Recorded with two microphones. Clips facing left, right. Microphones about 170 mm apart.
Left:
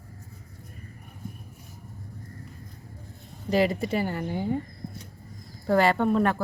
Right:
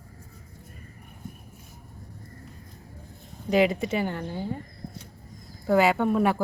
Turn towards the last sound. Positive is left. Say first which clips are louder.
# even
turn(degrees=-10)  # may be behind; listen again after turning